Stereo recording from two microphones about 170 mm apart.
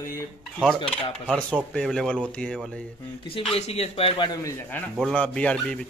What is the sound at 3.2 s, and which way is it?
Speech, 30° left (ahead or behind).